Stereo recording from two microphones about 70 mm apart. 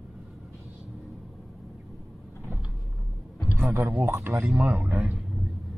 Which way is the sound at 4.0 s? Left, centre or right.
Right.